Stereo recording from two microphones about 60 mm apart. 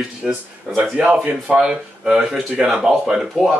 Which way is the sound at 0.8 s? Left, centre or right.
Right.